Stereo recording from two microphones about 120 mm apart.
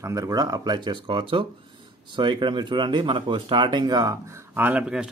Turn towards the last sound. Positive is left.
turn(degrees=-10)  # may be behind; listen again after turning